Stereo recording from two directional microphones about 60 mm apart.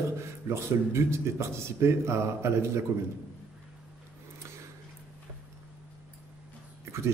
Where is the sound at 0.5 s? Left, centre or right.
Right.